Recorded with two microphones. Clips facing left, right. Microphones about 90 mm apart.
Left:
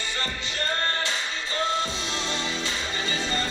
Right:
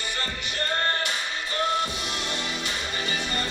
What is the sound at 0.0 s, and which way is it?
Music, 25° left (ahead or behind).